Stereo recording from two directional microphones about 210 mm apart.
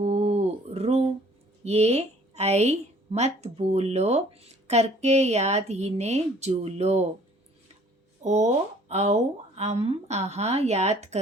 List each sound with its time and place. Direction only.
0.0 s a sound: 30° right (ahead or behind)
1.6 s a woman's voice: 30° right (ahead or behind)
8.2 s a woman's voice: 35° right (ahead or behind)